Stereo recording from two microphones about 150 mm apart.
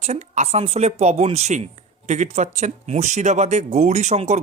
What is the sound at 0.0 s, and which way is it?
Speech, 50° right (ahead or behind).